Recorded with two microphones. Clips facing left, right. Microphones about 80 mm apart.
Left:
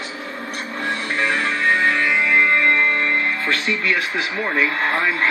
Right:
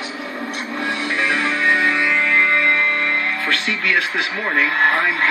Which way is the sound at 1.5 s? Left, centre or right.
Right.